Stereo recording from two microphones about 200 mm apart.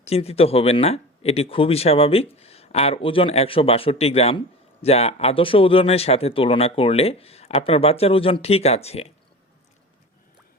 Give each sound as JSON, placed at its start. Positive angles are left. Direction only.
{"t": 0.0, "sound": "speech", "side_deg": 30}